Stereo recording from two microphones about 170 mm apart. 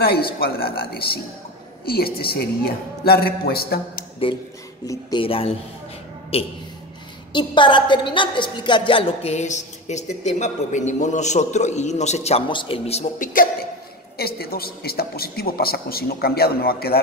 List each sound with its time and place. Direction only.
0.0 s a woman's voice: 65° left (ahead or behind)
4.2 s a woman's voice: 35° left (ahead or behind); by 13.5 s 55° left (ahead or behind)
14.1 s a woman's voice: 65° left (ahead or behind)